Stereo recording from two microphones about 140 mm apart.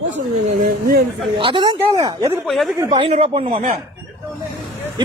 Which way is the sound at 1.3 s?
35° right (ahead or behind).